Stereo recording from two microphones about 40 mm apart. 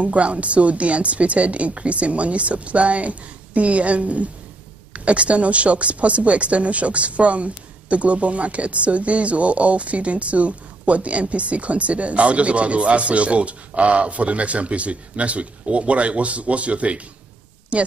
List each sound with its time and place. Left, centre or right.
0.0 s speech: right